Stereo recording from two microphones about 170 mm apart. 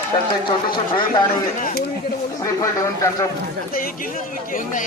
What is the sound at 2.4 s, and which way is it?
Speech, 20° left (ahead or behind).